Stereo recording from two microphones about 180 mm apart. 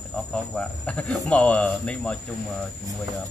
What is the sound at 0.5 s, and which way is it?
Speech, 5° left (ahead or behind).